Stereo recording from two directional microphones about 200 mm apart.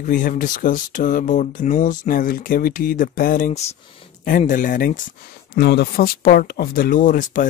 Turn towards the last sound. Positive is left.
turn(degrees=40)  # may be behind; listen again after turning